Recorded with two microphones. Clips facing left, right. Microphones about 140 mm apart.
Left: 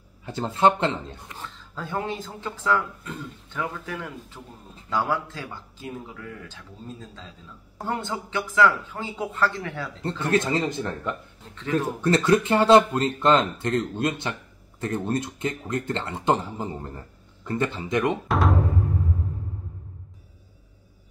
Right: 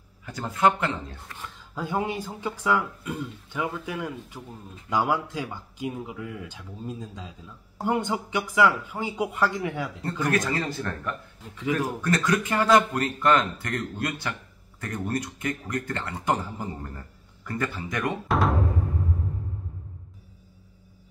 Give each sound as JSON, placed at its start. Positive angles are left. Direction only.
{"t": 0.2, "sound": "speech", "side_deg": 25}
{"t": 1.4, "sound": "speech", "side_deg": -10}
{"t": 10.0, "sound": "speech", "side_deg": 25}
{"t": 18.3, "sound": "music", "side_deg": 0}